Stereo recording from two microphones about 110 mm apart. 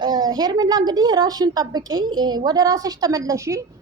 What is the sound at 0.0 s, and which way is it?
A woman's voice, 40° right (ahead or behind).